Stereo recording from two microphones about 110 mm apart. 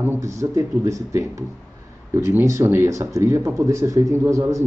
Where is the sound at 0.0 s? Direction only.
25° right (ahead or behind).